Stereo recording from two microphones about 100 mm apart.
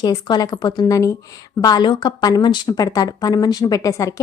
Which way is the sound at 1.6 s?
45° left (ahead or behind).